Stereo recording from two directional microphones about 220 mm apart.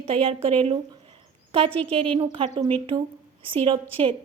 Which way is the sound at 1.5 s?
25° right (ahead or behind).